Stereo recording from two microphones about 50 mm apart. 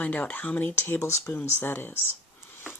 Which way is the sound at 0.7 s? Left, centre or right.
Left.